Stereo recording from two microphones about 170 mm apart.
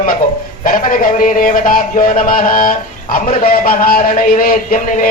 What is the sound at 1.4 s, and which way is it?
Speech, 55° left (ahead or behind).